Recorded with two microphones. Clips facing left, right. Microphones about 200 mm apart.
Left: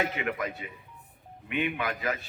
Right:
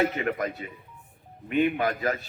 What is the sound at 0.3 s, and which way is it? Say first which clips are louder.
A man's voice: right 4 dB; 40° right (ahead or behind).